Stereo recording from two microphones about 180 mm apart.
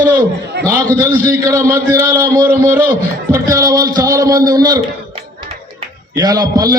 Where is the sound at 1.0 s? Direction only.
15° right (ahead or behind).